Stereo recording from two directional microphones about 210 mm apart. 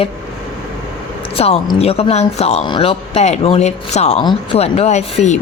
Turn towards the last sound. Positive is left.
turn(degrees=30)  # may be behind; listen again after turning